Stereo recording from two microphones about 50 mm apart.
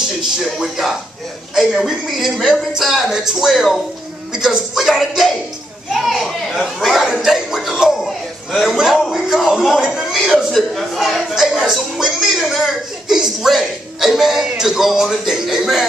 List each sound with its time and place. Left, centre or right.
0.6 s a man's voice: centre